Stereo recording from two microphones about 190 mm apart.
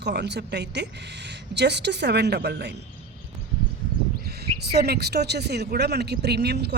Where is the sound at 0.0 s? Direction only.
60° right (ahead or behind).